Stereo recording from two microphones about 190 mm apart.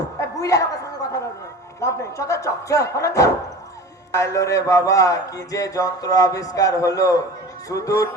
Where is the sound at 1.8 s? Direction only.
15° left (ahead or behind).